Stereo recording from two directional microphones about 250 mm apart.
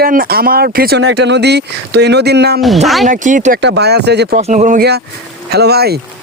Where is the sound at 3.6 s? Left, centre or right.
Right.